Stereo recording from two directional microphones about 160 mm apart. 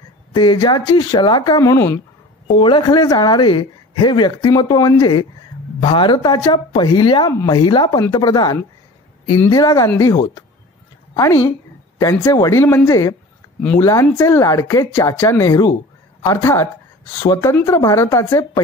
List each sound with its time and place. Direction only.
0.3 s speech: 30° left (ahead or behind)
2.4 s speech: 30° left (ahead or behind)